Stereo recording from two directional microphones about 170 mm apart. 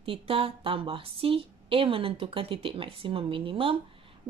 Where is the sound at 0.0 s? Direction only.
35° right (ahead or behind).